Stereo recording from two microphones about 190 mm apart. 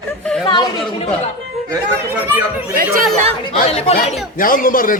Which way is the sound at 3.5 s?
30° left (ahead or behind).